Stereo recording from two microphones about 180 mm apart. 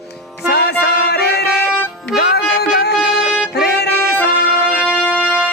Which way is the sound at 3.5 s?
65° left (ahead or behind).